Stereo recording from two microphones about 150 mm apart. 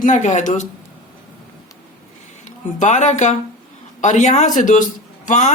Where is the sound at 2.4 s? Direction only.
55° left (ahead or behind).